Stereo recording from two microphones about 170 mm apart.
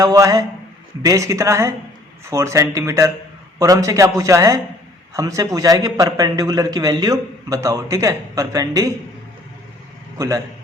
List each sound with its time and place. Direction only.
0.0 s a man's voice: 20° right (ahead or behind)
10.2 s a man's voice: 20° right (ahead or behind)